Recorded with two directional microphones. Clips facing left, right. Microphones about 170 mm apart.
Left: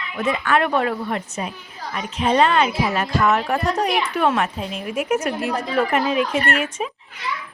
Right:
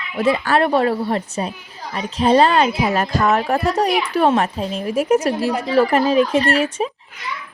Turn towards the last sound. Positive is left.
turn(degrees=-35)  # may be behind; listen again after turning